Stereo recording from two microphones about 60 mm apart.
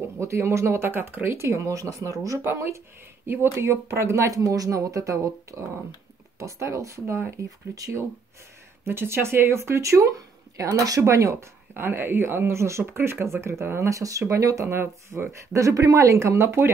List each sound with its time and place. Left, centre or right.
0.2 s speech: right
2.5 s speech: right
8.8 s speech: right
11.7 s speech: right
14.7 s speech: right
15.5 s speech: right